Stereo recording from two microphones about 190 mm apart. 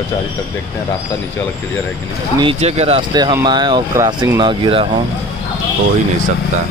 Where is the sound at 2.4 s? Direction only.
30° right (ahead or behind).